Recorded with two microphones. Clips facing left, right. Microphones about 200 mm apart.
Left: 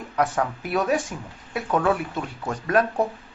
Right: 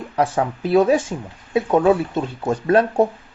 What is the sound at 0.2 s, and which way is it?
Speech, 25° right (ahead or behind).